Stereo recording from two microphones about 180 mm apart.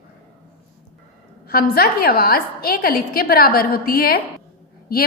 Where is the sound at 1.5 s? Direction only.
55° left (ahead or behind).